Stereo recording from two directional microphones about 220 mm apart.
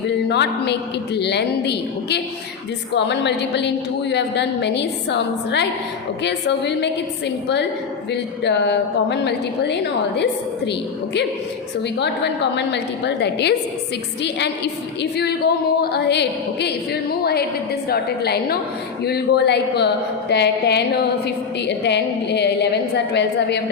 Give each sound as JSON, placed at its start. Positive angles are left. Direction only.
{"t": 0.3, "sound": "a woman's voice", "side_deg": 50}
{"t": 15.8, "sound": "a woman's voice", "side_deg": 50}